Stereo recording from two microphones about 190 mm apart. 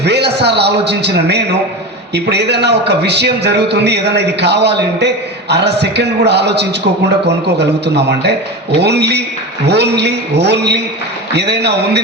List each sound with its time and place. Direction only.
0.0 s a man's voice: 60° right (ahead or behind)